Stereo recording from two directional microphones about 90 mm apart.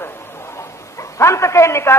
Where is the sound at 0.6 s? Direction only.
35° left (ahead or behind).